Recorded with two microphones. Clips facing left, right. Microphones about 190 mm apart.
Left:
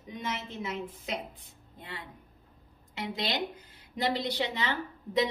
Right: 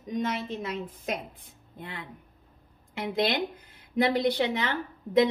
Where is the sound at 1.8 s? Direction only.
60° right (ahead or behind).